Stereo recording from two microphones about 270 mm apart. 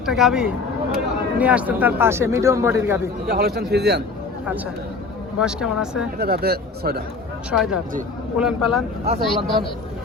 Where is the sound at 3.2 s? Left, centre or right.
Right.